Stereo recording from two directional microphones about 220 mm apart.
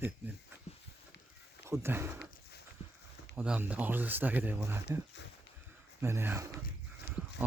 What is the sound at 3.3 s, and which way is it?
Speech, 5° right (ahead or behind).